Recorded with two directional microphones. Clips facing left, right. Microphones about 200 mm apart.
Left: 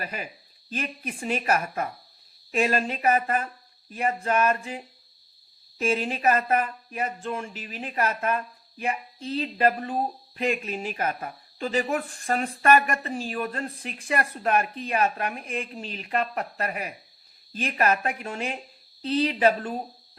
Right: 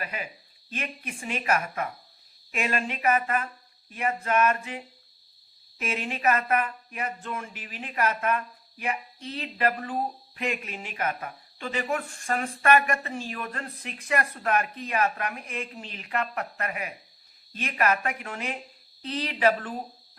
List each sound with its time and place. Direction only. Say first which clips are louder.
0.0 s speech: left 1 dB; 35° left (ahead or behind)
5.8 s speech: left 4 dB; 35° left (ahead or behind)